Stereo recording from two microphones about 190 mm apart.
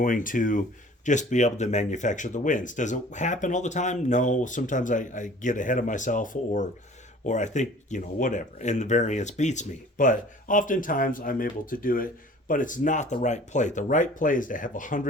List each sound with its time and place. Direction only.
0.0 s speech: 45° left (ahead or behind)